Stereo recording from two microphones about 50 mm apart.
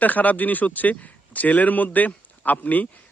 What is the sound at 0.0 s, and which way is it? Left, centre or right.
A man's voice, left.